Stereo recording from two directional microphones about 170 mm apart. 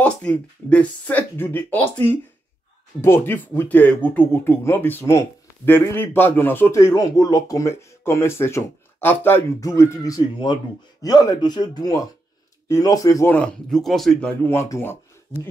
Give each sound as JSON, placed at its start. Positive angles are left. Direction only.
{"t": 0.0, "sound": "speech", "side_deg": 10}
{"t": 14.5, "sound": "speech", "side_deg": 15}